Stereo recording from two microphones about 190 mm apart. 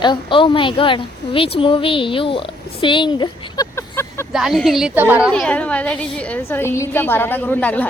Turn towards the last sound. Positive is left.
turn(degrees=10)  # may be behind; listen again after turning